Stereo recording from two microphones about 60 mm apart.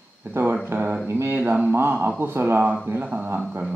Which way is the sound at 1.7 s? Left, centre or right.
Right.